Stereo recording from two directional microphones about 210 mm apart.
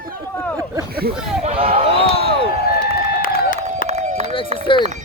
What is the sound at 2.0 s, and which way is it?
Slam, 25° left (ahead or behind).